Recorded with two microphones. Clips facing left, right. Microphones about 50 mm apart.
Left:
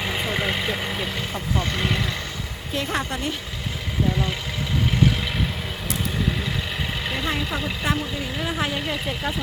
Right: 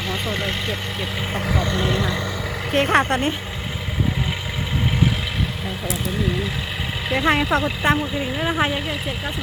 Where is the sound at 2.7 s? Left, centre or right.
Right.